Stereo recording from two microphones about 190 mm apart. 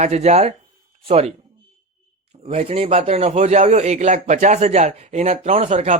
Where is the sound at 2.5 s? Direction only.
30° right (ahead or behind).